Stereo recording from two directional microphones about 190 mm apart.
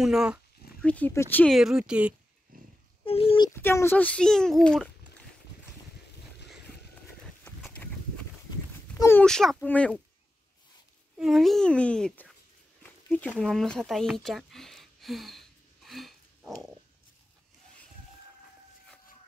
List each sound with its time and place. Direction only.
0.0 s speech: 5° right (ahead or behind)
0.8 s speech: 10° left (ahead or behind)
2.5 s pig: 45° right (ahead or behind)
3.1 s a child's voice: 30° left (ahead or behind); by 5.2 s centre (ahead or behind)
7.4 s a sound: 5° left (ahead or behind)
8.5 s livestock: 15° left (ahead or behind)
9.2 s speech: centre (ahead or behind)
11.1 s speech: centre (ahead or behind)
12.8 s a sound: 10° left (ahead or behind)